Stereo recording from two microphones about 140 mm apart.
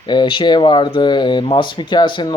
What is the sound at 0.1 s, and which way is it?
Speech, 35° left (ahead or behind).